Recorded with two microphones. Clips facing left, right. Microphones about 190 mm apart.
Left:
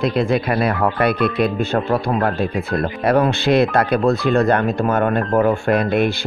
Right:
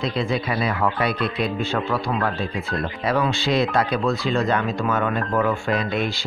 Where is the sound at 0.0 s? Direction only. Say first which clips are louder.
Left 6 dB; 60° left (ahead or behind).